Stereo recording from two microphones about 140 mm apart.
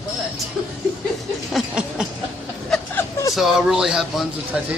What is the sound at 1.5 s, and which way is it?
Speech, 5° right (ahead or behind).